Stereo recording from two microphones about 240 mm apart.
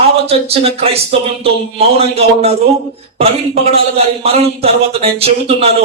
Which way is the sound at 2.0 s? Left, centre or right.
Right.